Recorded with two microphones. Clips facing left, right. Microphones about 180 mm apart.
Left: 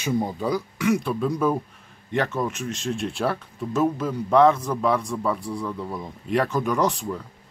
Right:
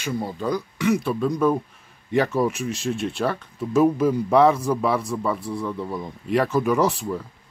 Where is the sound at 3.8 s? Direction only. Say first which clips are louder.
Right 5 dB; 10° right (ahead or behind).